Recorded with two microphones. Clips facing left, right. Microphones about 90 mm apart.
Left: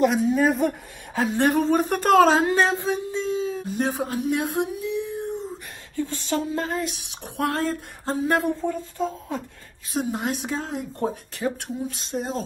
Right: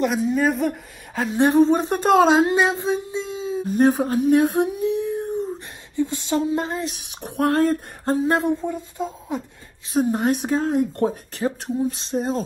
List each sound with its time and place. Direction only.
0.0 s a woman's voice: centre (ahead or behind)
1.4 s speech: 20° right (ahead or behind)
3.6 s humming: 45° right (ahead or behind)
5.9 s speech: 20° right (ahead or behind)
7.2 s speech: 45° right (ahead or behind)
8.3 s speech: 20° right (ahead or behind)
9.9 s speech: 50° right (ahead or behind)
11.3 s speech: 30° right (ahead or behind)